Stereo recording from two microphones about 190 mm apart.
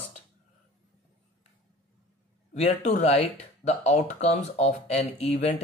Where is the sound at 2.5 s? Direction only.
35° left (ahead or behind).